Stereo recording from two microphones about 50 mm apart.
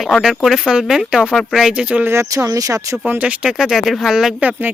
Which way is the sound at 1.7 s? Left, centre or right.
Right.